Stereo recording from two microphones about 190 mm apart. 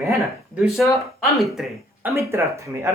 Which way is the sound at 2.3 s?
15° right (ahead or behind).